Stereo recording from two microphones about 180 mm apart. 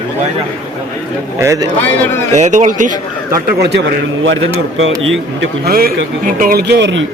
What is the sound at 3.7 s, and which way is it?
Speech, 85° right.